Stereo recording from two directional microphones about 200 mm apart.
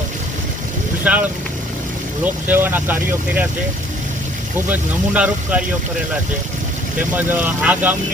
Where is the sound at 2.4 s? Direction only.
10° right (ahead or behind).